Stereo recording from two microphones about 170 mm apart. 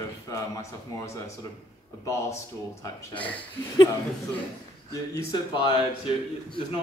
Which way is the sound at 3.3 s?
25° left (ahead or behind).